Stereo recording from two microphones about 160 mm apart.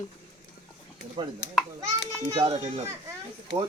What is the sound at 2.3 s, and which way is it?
Speech, 25° right (ahead or behind).